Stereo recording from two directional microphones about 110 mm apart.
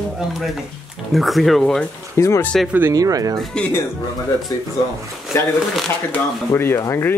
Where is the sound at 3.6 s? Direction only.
10° left (ahead or behind).